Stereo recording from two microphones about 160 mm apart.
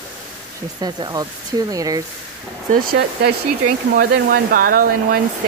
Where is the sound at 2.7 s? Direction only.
90° right.